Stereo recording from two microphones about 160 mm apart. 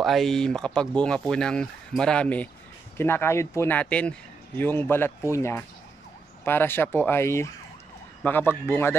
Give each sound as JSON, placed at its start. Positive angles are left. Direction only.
{"t": 0.0, "sound": "speech", "side_deg": 0}